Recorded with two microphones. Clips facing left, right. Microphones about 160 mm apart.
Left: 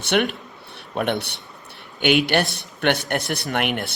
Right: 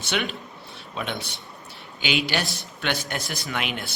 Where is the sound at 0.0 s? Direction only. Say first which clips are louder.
Left 7 dB; 55° left (ahead or behind).